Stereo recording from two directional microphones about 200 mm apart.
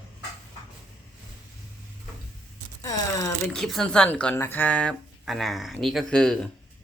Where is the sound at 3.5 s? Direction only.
Centre (ahead or behind).